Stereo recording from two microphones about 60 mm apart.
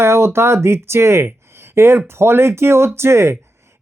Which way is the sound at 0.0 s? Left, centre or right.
Right.